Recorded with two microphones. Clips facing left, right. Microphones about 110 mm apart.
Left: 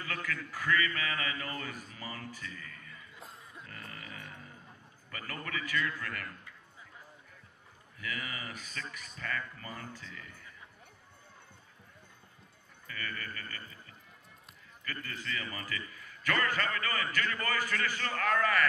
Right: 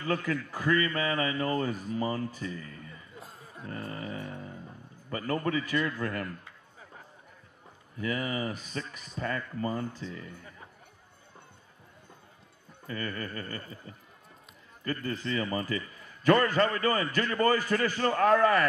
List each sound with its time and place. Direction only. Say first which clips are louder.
0.0 s a man's voice: right 8 dB; 30° right (ahead or behind)
3.4 s music: right 14 dB; 35° right (ahead or behind)
5.1 s a man's voice: right 11 dB; 30° right (ahead or behind)
8.0 s a man's voice: right 9 dB; 30° right (ahead or behind)
12.8 s a man's voice: right 6 dB; 30° right (ahead or behind)